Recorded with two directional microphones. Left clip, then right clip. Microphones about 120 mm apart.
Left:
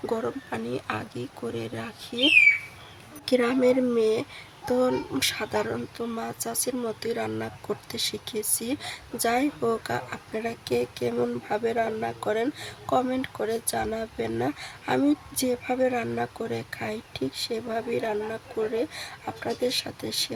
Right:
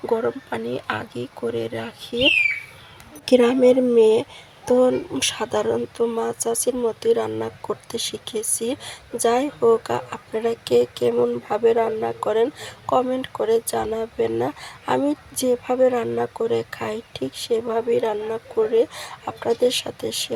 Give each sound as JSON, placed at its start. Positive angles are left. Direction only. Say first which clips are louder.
{"t": 0.0, "sound": "speech", "louder": "right 7 dB", "side_deg": -20}